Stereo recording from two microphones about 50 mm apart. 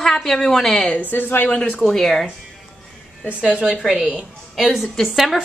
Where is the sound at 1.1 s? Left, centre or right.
Left.